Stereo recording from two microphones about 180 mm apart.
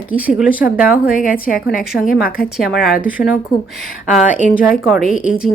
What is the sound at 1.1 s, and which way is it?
Speech, 50° left (ahead or behind).